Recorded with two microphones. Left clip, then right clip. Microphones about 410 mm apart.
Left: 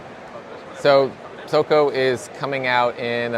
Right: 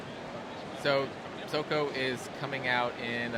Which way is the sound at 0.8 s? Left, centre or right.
Left.